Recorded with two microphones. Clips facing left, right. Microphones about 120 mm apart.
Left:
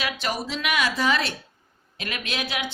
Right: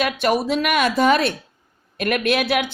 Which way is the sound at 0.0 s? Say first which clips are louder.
Right 9 dB; 55° right (ahead or behind).